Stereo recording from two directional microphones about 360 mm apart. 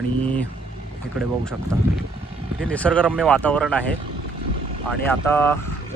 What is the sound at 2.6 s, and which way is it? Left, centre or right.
Speech, centre.